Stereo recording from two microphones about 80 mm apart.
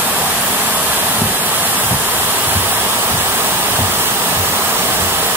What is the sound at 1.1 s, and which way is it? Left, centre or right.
Waterfall, right.